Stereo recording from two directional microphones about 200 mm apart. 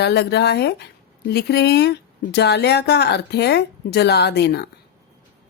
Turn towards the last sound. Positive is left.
turn(degrees=55)  # may be behind; listen again after turning